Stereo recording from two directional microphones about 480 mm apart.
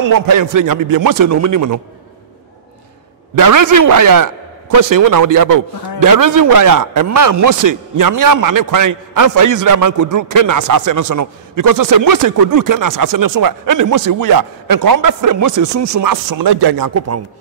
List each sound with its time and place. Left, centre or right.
0.0 s a man's voice: right
3.3 s a man's voice: right